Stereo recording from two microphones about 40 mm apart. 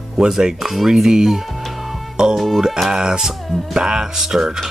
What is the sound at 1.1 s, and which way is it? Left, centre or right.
Music, centre.